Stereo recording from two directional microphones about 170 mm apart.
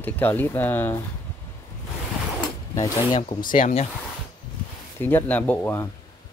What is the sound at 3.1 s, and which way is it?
Speech, 45° left (ahead or behind).